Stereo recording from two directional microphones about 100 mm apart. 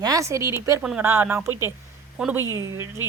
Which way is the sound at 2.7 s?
25° right (ahead or behind).